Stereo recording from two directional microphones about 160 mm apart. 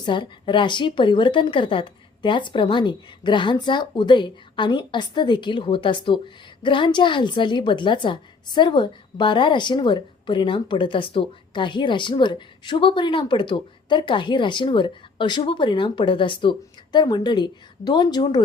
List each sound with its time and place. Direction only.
0.0 s a woman's voice: 30° left (ahead or behind)